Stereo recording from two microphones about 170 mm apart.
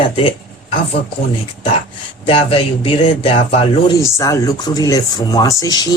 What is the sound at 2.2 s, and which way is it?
Speech, 30° left (ahead or behind).